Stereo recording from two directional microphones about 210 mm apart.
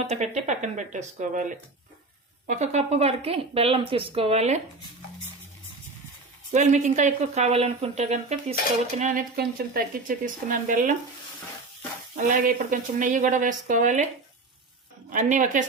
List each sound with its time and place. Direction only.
0.0 s speech: 30° right (ahead or behind)
6.5 s speech: 35° right (ahead or behind)
12.1 s speech: 40° right (ahead or behind)
15.1 s speech: 35° right (ahead or behind)